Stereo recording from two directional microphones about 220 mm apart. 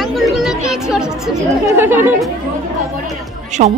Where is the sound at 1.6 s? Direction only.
10° right (ahead or behind).